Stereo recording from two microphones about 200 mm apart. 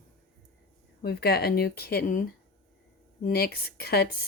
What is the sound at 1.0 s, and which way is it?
Speech, 55° left (ahead or behind).